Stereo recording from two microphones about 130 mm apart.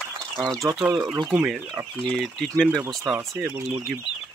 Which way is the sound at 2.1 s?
5° left (ahead or behind).